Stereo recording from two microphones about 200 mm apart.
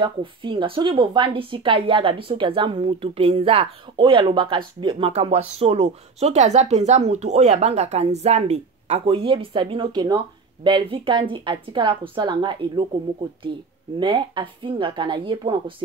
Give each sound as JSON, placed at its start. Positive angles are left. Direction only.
{"t": 0.0, "sound": "a woman's voice", "side_deg": -25}
{"t": 13.9, "sound": "a woman's voice", "side_deg": -25}